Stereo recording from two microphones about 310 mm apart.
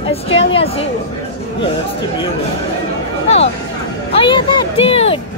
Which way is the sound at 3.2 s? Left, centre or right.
Centre.